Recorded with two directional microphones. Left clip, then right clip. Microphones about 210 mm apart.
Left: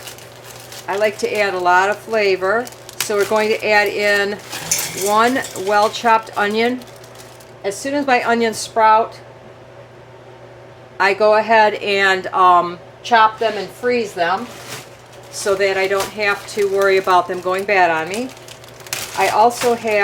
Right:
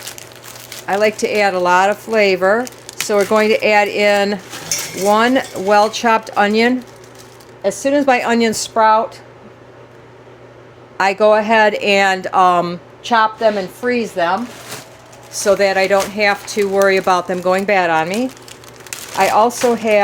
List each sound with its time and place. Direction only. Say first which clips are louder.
0.9 s speech: right 3 dB; 40° right (ahead or behind)
10.9 s speech: right 1 dB; 35° right (ahead or behind)
15.4 s speech: right 4 dB; 40° right (ahead or behind)
19.2 s speech: right 1 dB; 40° right (ahead or behind)